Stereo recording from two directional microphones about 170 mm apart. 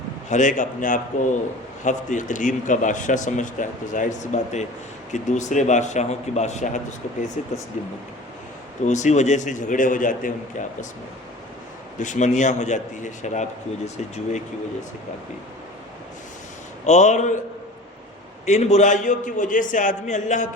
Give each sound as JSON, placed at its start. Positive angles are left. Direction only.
{"t": 0.3, "sound": "a man's voice", "side_deg": 45}
{"t": 8.8, "sound": "a man's voice", "side_deg": 45}
{"t": 11.9, "sound": "a man's voice", "side_deg": 45}
{"t": 16.8, "sound": "a man's voice", "side_deg": 40}
{"t": 18.4, "sound": "a man's voice", "side_deg": 40}